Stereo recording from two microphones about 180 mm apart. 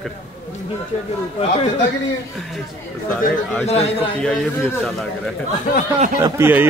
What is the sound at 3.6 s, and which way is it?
Speech, 30° left (ahead or behind).